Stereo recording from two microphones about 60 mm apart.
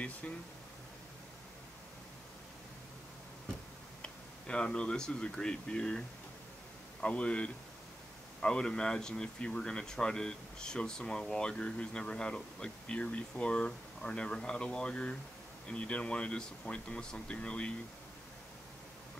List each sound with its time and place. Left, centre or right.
4.0 s speech: centre